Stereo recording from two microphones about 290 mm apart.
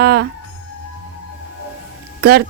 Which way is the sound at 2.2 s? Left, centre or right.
Right.